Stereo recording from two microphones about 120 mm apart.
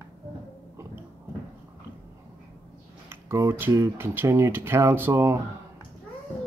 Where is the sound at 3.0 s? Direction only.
25° right (ahead or behind).